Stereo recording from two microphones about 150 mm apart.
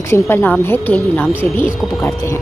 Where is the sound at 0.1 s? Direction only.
15° left (ahead or behind).